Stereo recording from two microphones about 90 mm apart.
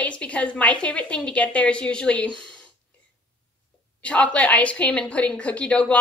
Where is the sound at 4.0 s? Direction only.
15° left (ahead or behind).